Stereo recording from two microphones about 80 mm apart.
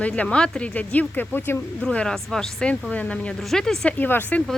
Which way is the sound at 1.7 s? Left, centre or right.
Centre.